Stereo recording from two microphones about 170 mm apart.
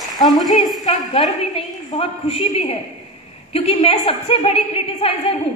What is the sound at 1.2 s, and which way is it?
A woman's voice, 35° left (ahead or behind).